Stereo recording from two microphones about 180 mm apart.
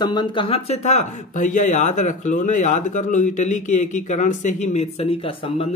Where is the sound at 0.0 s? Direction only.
25° left (ahead or behind).